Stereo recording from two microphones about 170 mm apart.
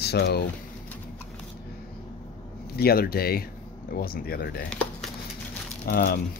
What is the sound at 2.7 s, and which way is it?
Speech, 65° left (ahead or behind).